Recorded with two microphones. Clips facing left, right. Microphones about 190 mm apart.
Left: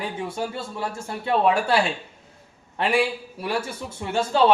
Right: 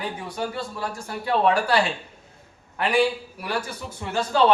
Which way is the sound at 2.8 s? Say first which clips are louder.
Right 1 dB; 25° left (ahead or behind).